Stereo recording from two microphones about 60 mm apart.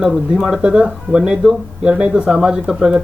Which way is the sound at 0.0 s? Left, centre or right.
Centre.